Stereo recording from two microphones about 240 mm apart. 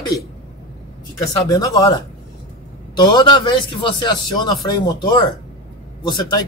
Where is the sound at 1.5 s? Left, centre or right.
Centre.